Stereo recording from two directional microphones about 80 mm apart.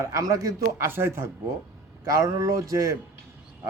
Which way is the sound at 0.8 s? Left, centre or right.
Right.